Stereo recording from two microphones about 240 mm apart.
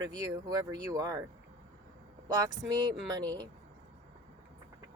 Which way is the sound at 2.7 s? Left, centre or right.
Centre.